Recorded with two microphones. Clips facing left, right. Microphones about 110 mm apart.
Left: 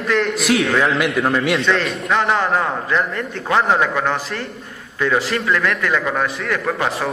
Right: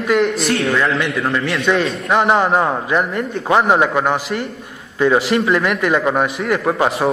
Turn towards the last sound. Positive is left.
turn(degrees=-25)  # may be behind; listen again after turning